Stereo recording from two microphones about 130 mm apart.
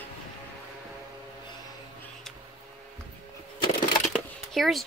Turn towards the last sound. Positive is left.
turn(degrees=0)  # may be behind; listen again after turning